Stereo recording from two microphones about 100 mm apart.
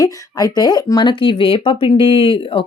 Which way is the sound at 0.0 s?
35° left (ahead or behind).